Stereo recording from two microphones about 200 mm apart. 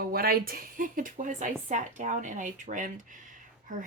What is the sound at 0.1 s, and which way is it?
Speech, 50° right (ahead or behind).